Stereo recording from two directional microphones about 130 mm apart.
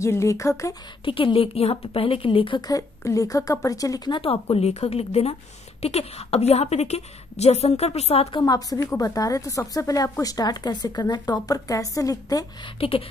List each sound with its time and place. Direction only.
0.0 s a woman's voice: 20° left (ahead or behind)
1.0 s a woman's voice: 45° left (ahead or behind)
2.7 s a woman's voice: 25° left (ahead or behind); by 8.4 s 50° left (ahead or behind)
8.4 s a woman's voice: 30° left (ahead or behind)
12.8 s a woman's voice: 50° left (ahead or behind)